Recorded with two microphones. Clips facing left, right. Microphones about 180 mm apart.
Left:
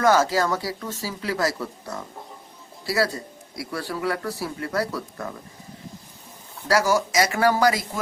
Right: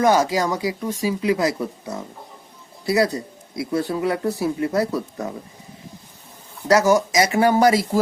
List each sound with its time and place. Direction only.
0.0 s a man's voice: 15° right (ahead or behind)
6.7 s a man's voice: 20° right (ahead or behind)